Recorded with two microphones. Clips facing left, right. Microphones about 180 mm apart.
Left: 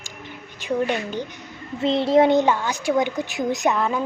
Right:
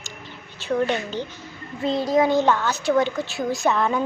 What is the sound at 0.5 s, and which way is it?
Speech, 15° left (ahead or behind).